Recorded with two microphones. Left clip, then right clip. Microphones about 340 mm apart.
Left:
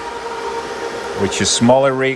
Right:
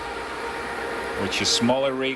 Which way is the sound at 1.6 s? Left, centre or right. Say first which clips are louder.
Left 10 dB; left.